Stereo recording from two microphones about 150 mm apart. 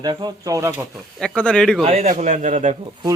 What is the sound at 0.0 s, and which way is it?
Speech, 30° right (ahead or behind).